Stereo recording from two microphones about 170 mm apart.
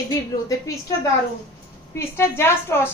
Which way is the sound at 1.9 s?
15° left (ahead or behind).